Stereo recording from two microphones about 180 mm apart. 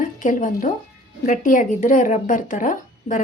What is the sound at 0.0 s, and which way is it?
A woman's voice, 45° left (ahead or behind).